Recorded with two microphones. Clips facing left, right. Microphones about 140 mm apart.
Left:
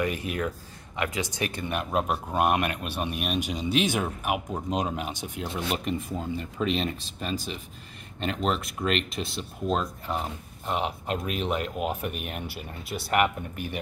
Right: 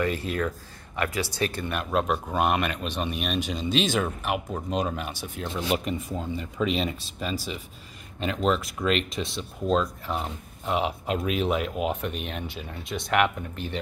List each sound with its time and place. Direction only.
0.0 s speech: 15° left (ahead or behind)
5.7 s speech: centre (ahead or behind)